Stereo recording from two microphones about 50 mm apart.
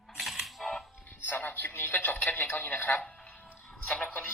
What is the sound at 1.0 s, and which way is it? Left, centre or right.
Music, left.